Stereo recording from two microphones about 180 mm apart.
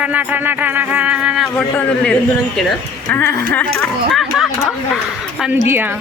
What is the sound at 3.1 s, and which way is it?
Speech, 10° left (ahead or behind).